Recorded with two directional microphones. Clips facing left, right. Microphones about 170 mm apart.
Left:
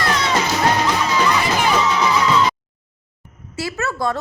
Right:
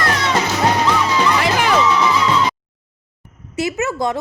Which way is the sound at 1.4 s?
90° right.